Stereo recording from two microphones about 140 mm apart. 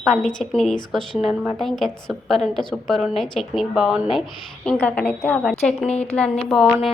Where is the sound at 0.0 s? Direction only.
5° left (ahead or behind).